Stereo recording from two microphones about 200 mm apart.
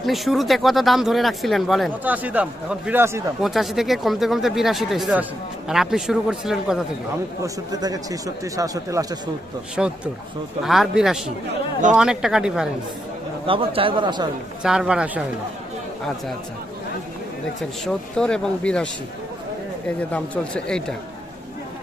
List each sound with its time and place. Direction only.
0.0 s speech: centre (ahead or behind)
3.4 s speech: centre (ahead or behind)
7.4 s speech: 20° right (ahead or behind)
9.7 s speech: 5° right (ahead or behind)
13.5 s speech: 25° right (ahead or behind)
14.6 s speech: 5° right (ahead or behind)
17.8 s speech: 5° left (ahead or behind)
20.0 s speech: 5° left (ahead or behind)